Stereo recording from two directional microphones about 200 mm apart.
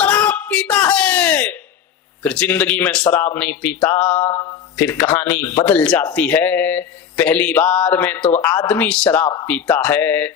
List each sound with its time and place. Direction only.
0.0 s a sound: 10° left (ahead or behind)
2.2 s a man's voice: 5° left (ahead or behind)
4.8 s a man's voice: 10° left (ahead or behind)